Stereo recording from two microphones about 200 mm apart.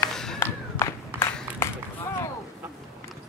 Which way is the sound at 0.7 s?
15° left (ahead or behind).